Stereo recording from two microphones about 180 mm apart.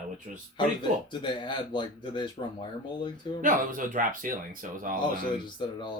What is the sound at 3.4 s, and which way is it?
Speech, 50° right (ahead or behind).